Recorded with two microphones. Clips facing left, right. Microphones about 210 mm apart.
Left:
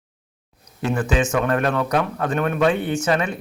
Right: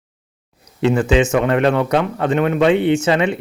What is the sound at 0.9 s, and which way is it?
Speech, 20° right (ahead or behind).